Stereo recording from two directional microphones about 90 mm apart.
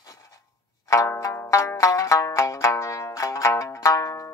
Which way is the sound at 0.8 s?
35° left (ahead or behind).